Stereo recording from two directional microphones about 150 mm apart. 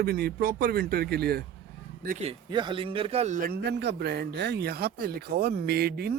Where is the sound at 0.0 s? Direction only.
90° right.